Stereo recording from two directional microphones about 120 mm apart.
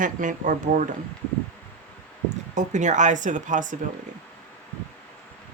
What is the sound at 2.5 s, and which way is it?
Speech, 90° right.